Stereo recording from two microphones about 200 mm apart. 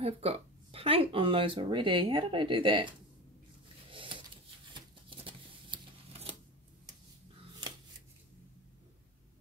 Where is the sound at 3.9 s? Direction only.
25° right (ahead or behind).